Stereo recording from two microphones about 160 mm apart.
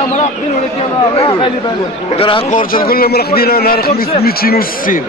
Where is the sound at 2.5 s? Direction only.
60° left (ahead or behind).